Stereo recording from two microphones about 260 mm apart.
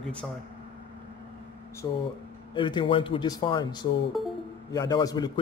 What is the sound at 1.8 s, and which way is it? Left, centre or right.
A man's voice, centre.